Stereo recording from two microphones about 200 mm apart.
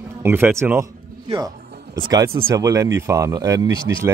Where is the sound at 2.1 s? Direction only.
15° right (ahead or behind).